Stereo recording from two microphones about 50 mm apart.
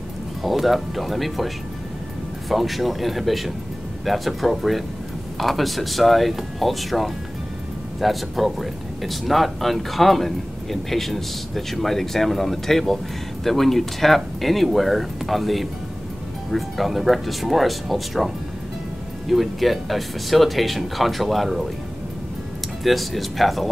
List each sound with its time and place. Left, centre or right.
0.4 s speech: centre
2.5 s speech: centre
22.8 s speech: centre